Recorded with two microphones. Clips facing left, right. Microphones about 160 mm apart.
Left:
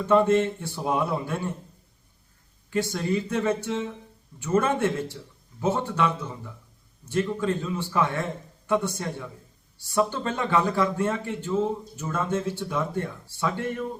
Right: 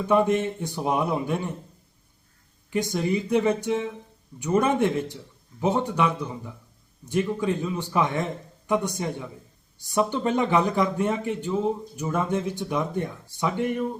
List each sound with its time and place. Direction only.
0.0 s speech: 15° right (ahead or behind)
2.6 s speech: 15° right (ahead or behind)